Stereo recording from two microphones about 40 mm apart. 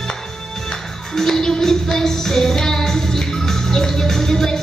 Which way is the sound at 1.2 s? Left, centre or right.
Centre.